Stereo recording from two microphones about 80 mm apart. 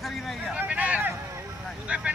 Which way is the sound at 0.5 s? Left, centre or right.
Centre.